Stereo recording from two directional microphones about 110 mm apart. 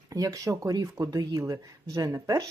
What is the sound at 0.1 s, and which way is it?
Speech, 35° right (ahead or behind).